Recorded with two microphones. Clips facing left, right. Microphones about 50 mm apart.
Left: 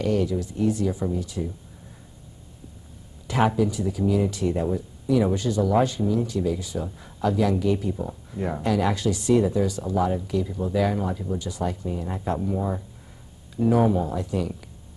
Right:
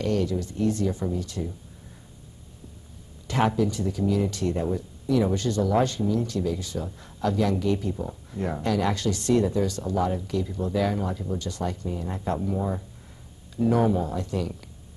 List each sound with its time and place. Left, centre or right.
0.0 s speech: centre
3.3 s speech: centre